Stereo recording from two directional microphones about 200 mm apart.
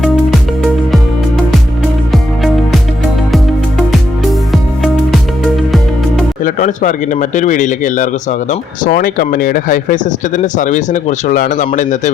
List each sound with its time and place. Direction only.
0.0 s music: centre (ahead or behind)
3.3 s music: centre (ahead or behind)
6.4 s speech: 40° left (ahead or behind)